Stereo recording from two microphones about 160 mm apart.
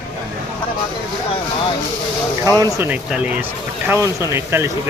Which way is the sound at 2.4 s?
20° right (ahead or behind).